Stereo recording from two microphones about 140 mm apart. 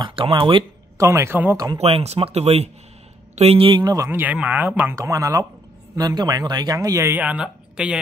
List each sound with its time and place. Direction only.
0.0 s speech: 40° right (ahead or behind)
0.9 s speech: 20° right (ahead or behind)
1.8 s speech: 45° right (ahead or behind)
3.8 s speech: 25° right (ahead or behind)
7.2 s speech: 10° right (ahead or behind)